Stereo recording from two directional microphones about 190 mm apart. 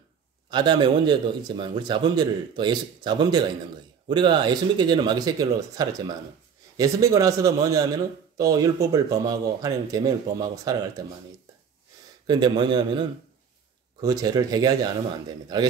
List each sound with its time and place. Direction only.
0.5 s a man's voice: 25° right (ahead or behind)
12.3 s a man's voice: 20° right (ahead or behind)
14.0 s a man's voice: 20° right (ahead or behind)